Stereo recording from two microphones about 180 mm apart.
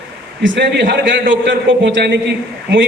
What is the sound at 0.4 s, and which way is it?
A man's voice, 90° right.